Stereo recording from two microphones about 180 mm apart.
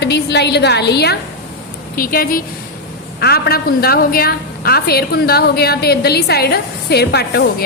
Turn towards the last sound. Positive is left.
turn(degrees=65)  # may be behind; listen again after turning